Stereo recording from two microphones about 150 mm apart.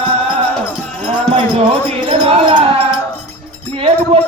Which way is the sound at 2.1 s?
40° right (ahead or behind).